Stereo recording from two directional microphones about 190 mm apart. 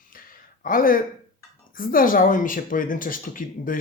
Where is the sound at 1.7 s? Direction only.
45° left (ahead or behind).